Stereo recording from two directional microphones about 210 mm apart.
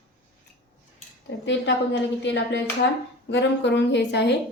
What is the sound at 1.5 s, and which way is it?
A woman's voice, 55° left (ahead or behind).